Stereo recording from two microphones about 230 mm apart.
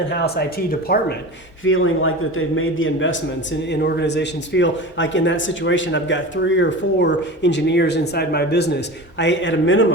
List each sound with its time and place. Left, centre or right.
0.1 s a man's voice: left
1.6 s a man's voice: left